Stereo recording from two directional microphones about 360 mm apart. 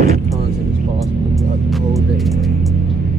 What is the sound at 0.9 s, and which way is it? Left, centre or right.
Music, centre.